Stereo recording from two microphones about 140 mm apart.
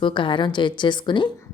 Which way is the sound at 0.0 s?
35° left (ahead or behind).